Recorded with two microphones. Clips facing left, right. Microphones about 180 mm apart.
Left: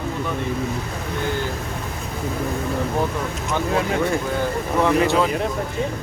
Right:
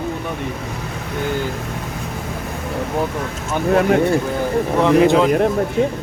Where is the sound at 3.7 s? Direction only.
55° right (ahead or behind).